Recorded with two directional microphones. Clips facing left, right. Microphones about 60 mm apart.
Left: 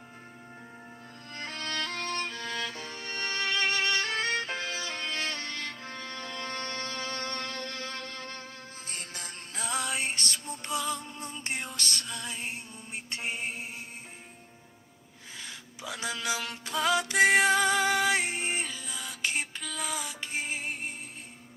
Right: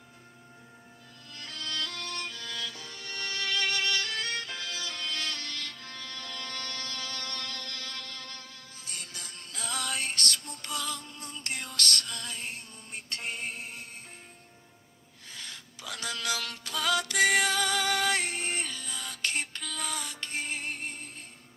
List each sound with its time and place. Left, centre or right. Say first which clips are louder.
1.3 s music: left 3 dB; left; by 13.7 s centre
15.4 s music: left 2 dB; centre